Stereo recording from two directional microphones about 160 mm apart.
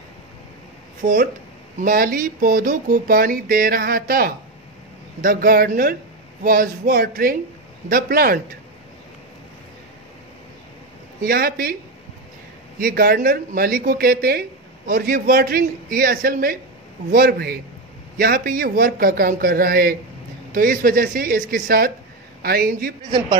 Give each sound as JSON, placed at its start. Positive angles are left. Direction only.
{"t": 1.0, "sound": "a man's voice", "side_deg": -65}
{"t": 11.2, "sound": "a man's voice", "side_deg": -70}
{"t": 12.7, "sound": "a man's voice", "side_deg": -65}